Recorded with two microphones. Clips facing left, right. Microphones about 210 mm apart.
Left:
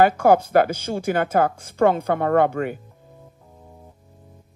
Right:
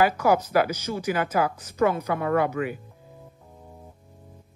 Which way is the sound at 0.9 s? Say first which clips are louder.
Left 5 dB; 50° left (ahead or behind).